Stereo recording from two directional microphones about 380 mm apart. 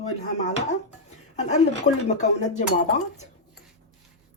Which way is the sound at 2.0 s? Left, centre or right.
Centre.